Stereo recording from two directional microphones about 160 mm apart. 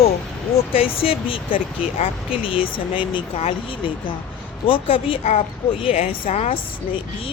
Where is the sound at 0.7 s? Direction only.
35° left (ahead or behind).